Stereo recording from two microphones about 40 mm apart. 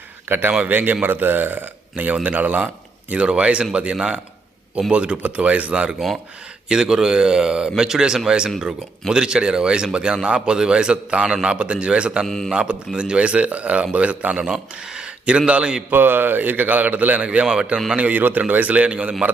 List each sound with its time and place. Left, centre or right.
0.3 s a man's voice: right
2.2 s a man's voice: right
3.1 s speech: right
6.7 s speech: centre
12.2 s speech: centre
12.5 s speech: right
14.4 s speech: centre
15.9 s a man's voice: right
17.2 s speech: right
17.9 s speech: right
18.2 s a man's voice: right